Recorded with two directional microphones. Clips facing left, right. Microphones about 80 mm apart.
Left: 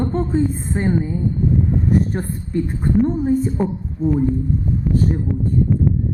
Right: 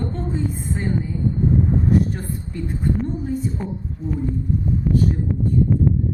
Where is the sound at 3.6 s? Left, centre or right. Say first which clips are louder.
Left 8 dB; centre.